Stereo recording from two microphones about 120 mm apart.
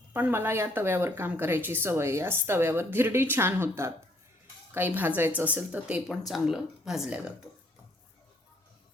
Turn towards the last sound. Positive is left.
turn(degrees=-5)  # may be behind; listen again after turning